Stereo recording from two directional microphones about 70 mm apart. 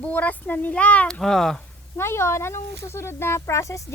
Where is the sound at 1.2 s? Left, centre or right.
Centre.